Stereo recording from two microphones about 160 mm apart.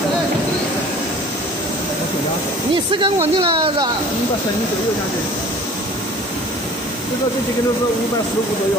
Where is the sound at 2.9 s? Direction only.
30° right (ahead or behind).